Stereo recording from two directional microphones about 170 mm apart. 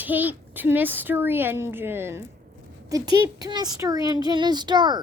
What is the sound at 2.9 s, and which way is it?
Speech, 25° right (ahead or behind).